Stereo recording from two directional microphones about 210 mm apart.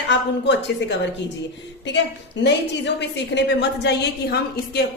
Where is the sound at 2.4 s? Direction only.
55° left (ahead or behind).